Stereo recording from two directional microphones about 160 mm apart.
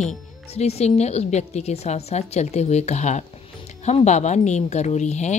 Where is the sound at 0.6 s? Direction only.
40° left (ahead or behind).